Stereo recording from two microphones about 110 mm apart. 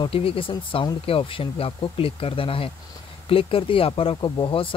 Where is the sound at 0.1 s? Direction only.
55° left (ahead or behind).